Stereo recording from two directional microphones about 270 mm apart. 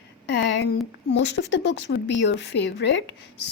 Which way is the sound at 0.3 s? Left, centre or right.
Left.